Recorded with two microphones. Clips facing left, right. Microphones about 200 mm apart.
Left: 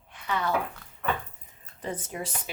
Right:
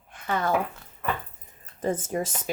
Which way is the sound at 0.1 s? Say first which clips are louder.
Right 3 dB; 45° right (ahead or behind).